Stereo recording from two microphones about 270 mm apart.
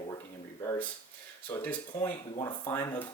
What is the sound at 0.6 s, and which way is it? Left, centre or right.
Speech, centre.